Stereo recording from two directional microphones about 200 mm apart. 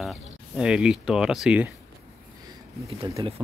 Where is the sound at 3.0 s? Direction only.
30° right (ahead or behind).